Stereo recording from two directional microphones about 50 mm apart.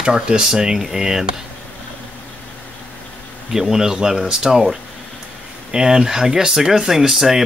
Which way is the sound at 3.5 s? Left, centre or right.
Centre.